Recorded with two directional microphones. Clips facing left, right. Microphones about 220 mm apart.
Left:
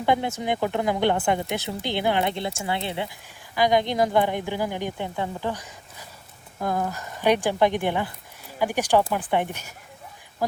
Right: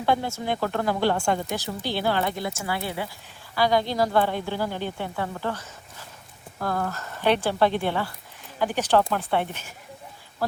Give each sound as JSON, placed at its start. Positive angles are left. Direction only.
{"t": 0.0, "sound": "a woman's voice", "side_deg": 20}